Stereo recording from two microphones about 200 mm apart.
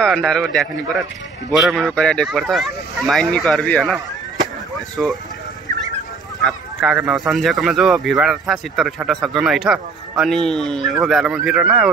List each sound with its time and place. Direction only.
0.0 s speech: centre (ahead or behind)
6.4 s speech: 5° right (ahead or behind)